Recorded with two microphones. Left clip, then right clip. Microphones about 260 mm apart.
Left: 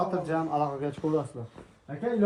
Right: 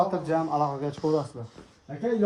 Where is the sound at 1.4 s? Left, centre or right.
Right.